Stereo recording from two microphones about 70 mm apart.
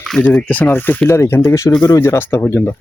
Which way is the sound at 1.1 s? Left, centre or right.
Left.